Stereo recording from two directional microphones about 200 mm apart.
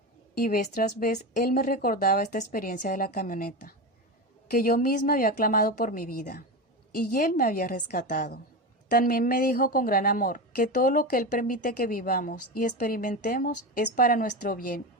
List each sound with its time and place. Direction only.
0.3 s a woman's voice: 45° left (ahead or behind)